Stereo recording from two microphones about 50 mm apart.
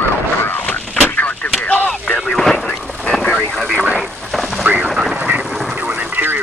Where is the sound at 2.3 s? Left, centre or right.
Centre.